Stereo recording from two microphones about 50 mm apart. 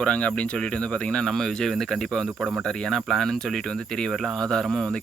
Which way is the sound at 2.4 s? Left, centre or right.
Right.